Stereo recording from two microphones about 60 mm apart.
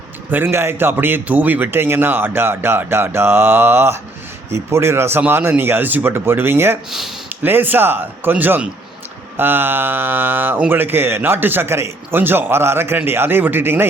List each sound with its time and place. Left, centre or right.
0.3 s a man's voice: right